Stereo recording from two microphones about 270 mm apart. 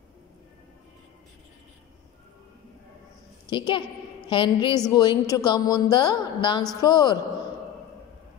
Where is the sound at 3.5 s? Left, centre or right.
Centre.